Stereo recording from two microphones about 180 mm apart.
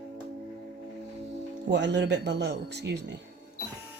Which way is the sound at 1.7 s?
75° right (ahead or behind).